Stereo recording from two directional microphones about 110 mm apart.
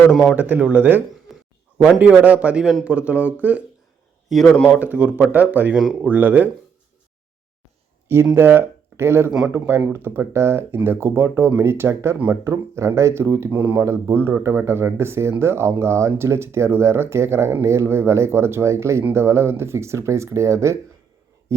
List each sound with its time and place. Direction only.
0.1 s speech: 5° right (ahead or behind)
1.3 s a sound: centre (ahead or behind)
1.8 s speech: 10° right (ahead or behind)
4.3 s speech: centre (ahead or behind)
4.8 s speech: 15° right (ahead or behind)
6.1 s speech: 15° right (ahead or behind)
8.0 s speech: 20° right (ahead or behind)